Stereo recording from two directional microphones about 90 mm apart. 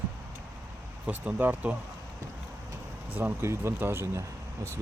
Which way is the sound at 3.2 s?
25° right (ahead or behind).